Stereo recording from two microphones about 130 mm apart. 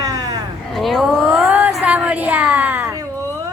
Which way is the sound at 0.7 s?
Centre (ahead or behind).